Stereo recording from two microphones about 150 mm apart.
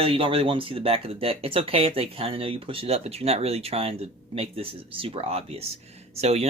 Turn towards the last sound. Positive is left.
turn(degrees=-45)  # may be behind; listen again after turning